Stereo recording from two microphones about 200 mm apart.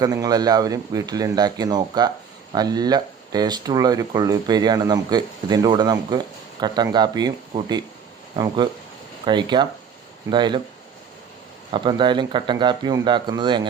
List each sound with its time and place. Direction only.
0.0 s speech: 20° right (ahead or behind)
11.7 s speech: 25° right (ahead or behind)